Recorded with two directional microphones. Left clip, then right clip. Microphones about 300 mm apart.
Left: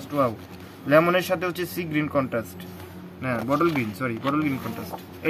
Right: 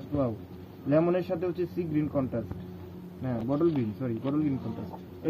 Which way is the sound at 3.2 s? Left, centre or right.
Centre.